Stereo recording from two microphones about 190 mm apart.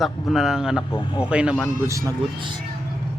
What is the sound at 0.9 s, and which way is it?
Speech, 25° left (ahead or behind).